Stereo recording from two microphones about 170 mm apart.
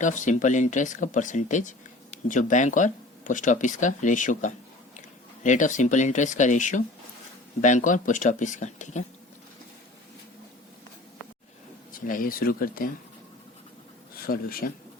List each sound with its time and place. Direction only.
0.0 s speech: 50° left (ahead or behind)
11.9 s speech: 55° left (ahead or behind)
14.3 s speech: 60° left (ahead or behind)